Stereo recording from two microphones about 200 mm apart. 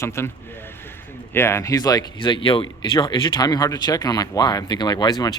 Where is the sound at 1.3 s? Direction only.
15° left (ahead or behind).